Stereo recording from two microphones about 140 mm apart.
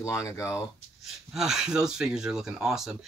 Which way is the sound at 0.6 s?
Centre (ahead or behind).